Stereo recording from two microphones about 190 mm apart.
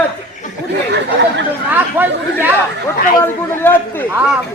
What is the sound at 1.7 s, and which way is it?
Chatter, 10° right (ahead or behind).